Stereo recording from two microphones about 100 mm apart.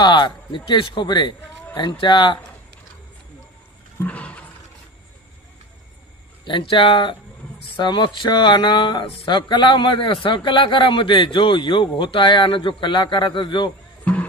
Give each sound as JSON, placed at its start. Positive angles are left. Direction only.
{"t": 0.0, "sound": "speech", "side_deg": 55}
{"t": 4.0, "sound": "roaring cats", "side_deg": 10}
{"t": 6.4, "sound": "speech", "side_deg": 55}
{"t": 14.0, "sound": "music", "side_deg": 15}